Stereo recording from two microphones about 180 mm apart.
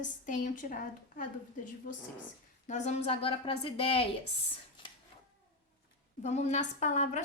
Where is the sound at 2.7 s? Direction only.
40° left (ahead or behind).